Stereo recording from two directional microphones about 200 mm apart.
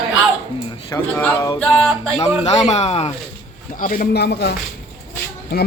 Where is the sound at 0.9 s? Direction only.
10° left (ahead or behind).